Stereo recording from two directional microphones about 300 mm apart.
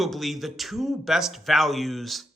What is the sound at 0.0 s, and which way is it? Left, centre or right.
Speech, centre.